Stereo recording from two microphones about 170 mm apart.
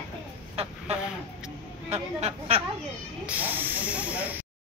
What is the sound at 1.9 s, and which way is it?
Speech, 40° right (ahead or behind).